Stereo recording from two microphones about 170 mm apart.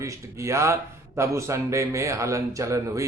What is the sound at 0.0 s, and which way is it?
A man's voice, 20° right (ahead or behind).